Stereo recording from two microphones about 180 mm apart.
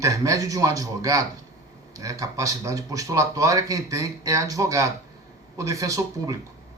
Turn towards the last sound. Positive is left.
turn(degrees=-20)  # may be behind; listen again after turning